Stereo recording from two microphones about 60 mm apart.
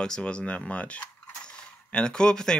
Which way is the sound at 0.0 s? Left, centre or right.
Centre.